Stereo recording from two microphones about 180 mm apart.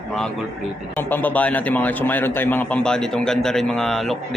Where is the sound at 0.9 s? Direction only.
10° left (ahead or behind).